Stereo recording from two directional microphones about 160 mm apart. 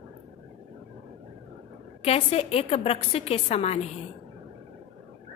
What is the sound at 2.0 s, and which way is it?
A woman's voice, 40° left (ahead or behind).